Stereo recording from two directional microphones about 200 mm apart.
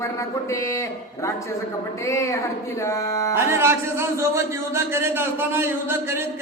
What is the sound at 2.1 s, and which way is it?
Speech, 15° left (ahead or behind).